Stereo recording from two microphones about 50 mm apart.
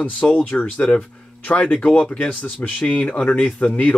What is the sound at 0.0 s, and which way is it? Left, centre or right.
Speech, left.